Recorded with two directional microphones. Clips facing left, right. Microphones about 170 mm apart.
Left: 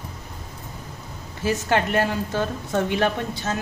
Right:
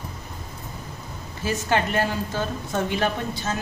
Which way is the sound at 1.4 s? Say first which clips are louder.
Left 2 dB; 65° left (ahead or behind).